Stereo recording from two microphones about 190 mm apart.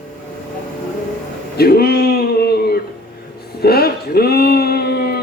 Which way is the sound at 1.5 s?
55° left (ahead or behind).